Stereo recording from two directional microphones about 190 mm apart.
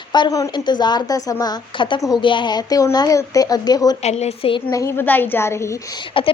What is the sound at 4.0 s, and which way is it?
Speech, 35° left (ahead or behind).